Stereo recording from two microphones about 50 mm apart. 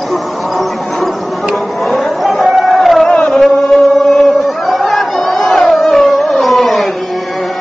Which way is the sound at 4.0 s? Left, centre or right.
Centre.